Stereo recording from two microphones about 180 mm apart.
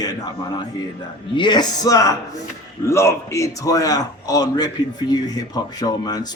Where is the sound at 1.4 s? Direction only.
25° left (ahead or behind).